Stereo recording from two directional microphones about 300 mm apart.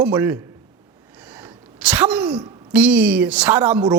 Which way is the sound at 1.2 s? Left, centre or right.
Centre.